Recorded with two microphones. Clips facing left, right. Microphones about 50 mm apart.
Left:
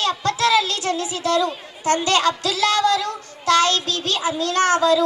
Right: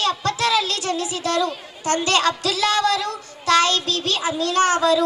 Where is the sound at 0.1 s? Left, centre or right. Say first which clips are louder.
Left 2 dB; left.